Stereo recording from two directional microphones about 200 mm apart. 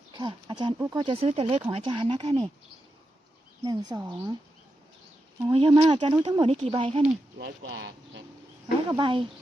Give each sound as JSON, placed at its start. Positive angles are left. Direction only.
{"t": 0.1, "sound": "a sound", "side_deg": -20}
{"t": 0.8, "sound": "speech", "side_deg": -15}
{"t": 1.0, "sound": "speech", "side_deg": -30}
{"t": 3.6, "sound": "speech", "side_deg": -20}
{"t": 5.5, "sound": "speech", "side_deg": -25}
{"t": 7.3, "sound": "speech", "side_deg": -60}
{"t": 9.0, "sound": "speech", "side_deg": -25}